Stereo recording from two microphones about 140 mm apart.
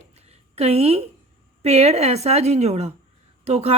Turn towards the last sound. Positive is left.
turn(degrees=-50)  # may be behind; listen again after turning